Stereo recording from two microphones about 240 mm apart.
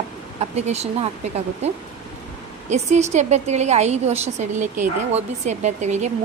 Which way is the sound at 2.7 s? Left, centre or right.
Right.